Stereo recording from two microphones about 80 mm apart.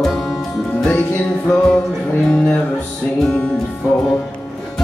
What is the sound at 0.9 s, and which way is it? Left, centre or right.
Music, left.